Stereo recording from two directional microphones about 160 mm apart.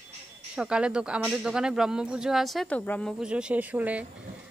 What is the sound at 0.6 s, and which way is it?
Speech, 5° right (ahead or behind).